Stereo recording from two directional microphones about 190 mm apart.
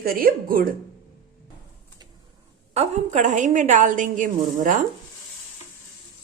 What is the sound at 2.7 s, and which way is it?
A woman's voice, 40° right (ahead or behind).